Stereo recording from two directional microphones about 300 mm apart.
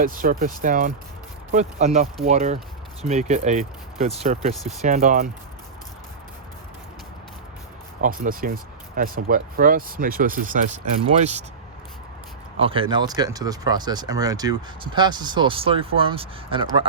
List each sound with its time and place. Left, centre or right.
0.0 s speech: right
8.0 s speech: right
12.5 s speech: centre